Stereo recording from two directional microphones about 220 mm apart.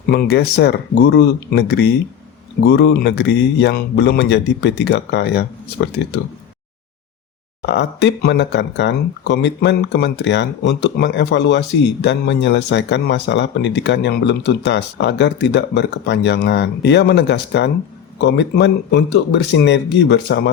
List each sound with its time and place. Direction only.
0.1 s speech: 45° left (ahead or behind)
7.7 s speech: 50° left (ahead or behind)